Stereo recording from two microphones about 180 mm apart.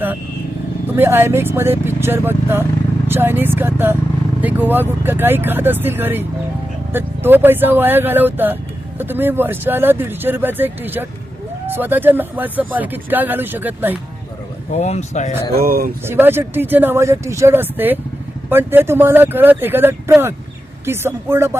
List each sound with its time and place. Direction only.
0.9 s speech: 10° right (ahead or behind)
14.7 s speech: 40° left (ahead or behind)
15.5 s speech: 55° right (ahead or behind)
16.0 s speech: 10° right (ahead or behind)